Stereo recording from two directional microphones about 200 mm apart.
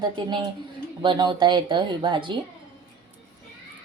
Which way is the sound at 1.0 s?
25° right (ahead or behind).